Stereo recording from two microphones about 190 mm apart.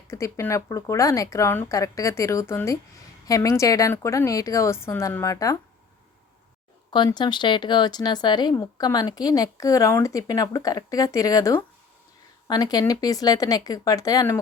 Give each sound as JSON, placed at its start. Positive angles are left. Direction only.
{"t": 0.1, "sound": "speech", "side_deg": 15}
{"t": 6.9, "sound": "speech", "side_deg": 25}